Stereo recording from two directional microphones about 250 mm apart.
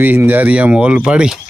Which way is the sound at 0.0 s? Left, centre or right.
Centre.